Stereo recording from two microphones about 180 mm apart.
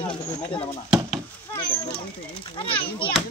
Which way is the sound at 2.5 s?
30° left (ahead or behind).